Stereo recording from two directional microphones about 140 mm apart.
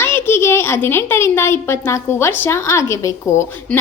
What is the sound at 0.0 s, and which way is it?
A child's voice, 15° left (ahead or behind).